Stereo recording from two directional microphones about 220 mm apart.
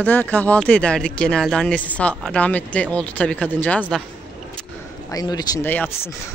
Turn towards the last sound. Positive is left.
turn(degrees=10)  # may be behind; listen again after turning